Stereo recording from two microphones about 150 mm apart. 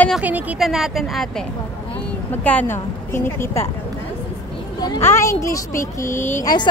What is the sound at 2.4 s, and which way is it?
A woman's voice, 10° left (ahead or behind).